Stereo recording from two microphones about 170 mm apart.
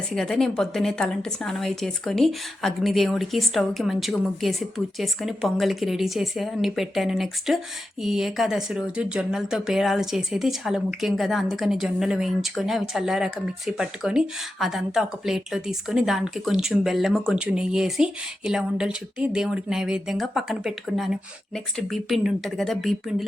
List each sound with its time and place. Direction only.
0.2 s speech: centre (ahead or behind)